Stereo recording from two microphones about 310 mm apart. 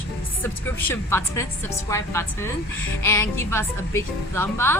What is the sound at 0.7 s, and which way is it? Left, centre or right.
A woman's voice, centre.